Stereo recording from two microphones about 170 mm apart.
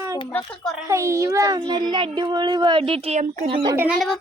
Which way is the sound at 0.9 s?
15° right (ahead or behind).